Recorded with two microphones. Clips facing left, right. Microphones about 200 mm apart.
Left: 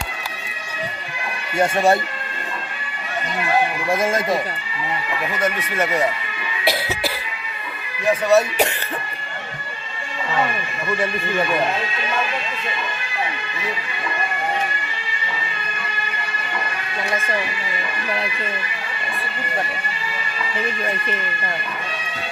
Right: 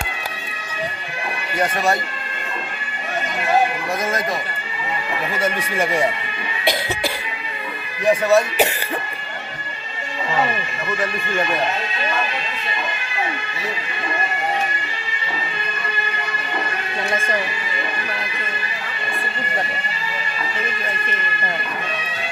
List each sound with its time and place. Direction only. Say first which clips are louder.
1.5 s speech: left 4 dB; 30° left (ahead or behind)
3.8 s speech: left 3 dB; 25° left (ahead or behind)
5.7 s speech: right 1 dB; 10° right (ahead or behind)
6.7 s cough: even; 5° left (ahead or behind)
8.3 s speech: left 3 dB; centre (ahead or behind)